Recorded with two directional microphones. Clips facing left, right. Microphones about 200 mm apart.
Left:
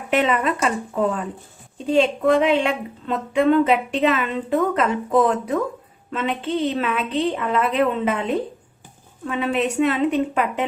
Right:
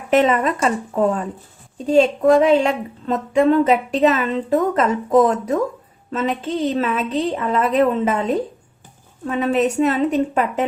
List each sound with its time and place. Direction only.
0.1 s a woman's voice: 45° right (ahead or behind)